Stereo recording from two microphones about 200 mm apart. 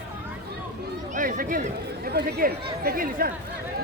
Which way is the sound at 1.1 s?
45° right (ahead or behind).